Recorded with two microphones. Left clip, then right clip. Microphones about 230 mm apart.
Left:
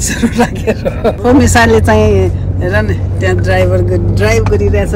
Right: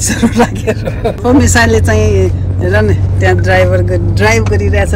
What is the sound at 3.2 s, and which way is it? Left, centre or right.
Speech, right.